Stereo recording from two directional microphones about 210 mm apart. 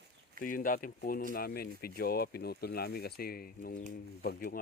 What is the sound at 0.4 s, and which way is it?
Speech, 40° left (ahead or behind).